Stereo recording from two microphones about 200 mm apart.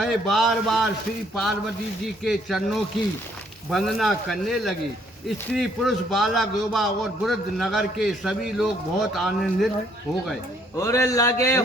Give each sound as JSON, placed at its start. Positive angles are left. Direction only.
{"t": 0.0, "sound": "a man's voice", "side_deg": 0}
{"t": 2.2, "sound": "a man's voice", "side_deg": 0}
{"t": 10.8, "sound": "speech", "side_deg": 15}